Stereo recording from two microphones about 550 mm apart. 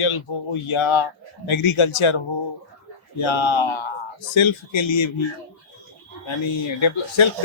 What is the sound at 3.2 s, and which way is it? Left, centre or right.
Speech, left.